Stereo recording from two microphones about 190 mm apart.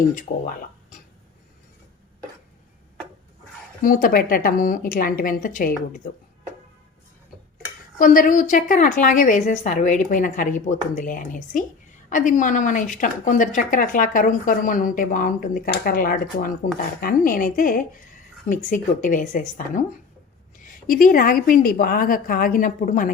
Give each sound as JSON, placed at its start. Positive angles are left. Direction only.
{"t": 0.1, "sound": "a woman's voice", "side_deg": 40}
{"t": 3.8, "sound": "a woman's voice", "side_deg": 45}
{"t": 7.9, "sound": "a woman's voice", "side_deg": 45}
{"t": 20.8, "sound": "a woman's voice", "side_deg": 50}